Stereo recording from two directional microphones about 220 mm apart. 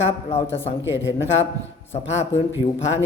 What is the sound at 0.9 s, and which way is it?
Speech, 55° left (ahead or behind).